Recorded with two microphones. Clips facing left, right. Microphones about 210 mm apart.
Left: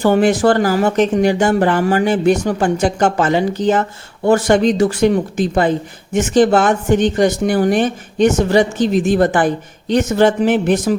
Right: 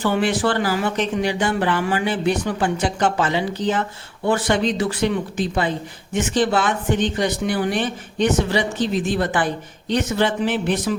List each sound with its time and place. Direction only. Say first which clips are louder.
0.0 s speech: left 7 dB; 45° left (ahead or behind)